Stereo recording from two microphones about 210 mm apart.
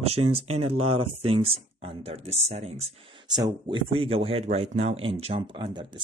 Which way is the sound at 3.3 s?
20° right (ahead or behind).